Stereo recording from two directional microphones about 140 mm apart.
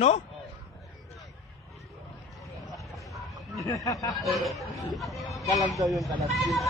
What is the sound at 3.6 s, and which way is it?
Speech, 25° left (ahead or behind).